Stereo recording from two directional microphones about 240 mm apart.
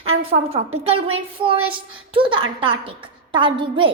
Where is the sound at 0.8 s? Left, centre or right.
Right.